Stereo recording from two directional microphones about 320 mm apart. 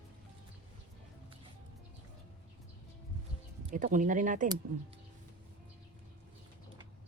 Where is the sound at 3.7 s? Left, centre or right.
Right.